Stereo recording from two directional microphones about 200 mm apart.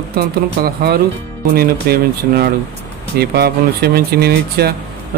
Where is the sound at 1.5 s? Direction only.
50° right (ahead or behind).